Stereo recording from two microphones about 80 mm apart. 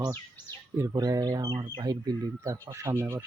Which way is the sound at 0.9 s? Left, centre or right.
Right.